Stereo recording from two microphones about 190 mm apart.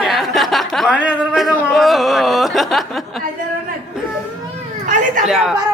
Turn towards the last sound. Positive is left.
turn(degrees=-5)  # may be behind; listen again after turning